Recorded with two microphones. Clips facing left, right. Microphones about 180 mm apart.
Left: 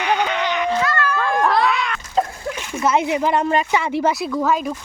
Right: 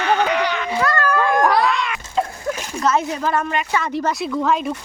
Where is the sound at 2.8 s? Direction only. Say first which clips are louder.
Left 2 dB; 15° left (ahead or behind).